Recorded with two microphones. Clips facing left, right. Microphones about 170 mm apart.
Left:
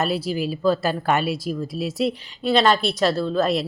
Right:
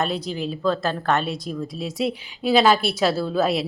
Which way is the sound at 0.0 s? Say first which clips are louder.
Left 2 dB; 5° left (ahead or behind).